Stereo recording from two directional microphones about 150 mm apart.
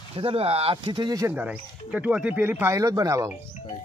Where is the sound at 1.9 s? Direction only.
5° right (ahead or behind).